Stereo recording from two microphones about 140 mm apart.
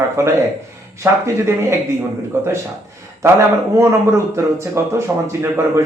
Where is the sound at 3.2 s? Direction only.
20° right (ahead or behind).